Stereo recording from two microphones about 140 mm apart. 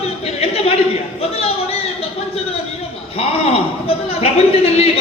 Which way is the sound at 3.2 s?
45° left (ahead or behind).